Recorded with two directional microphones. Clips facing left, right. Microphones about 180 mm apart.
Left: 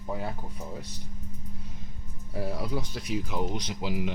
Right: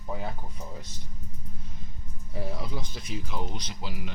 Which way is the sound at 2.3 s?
5° left (ahead or behind).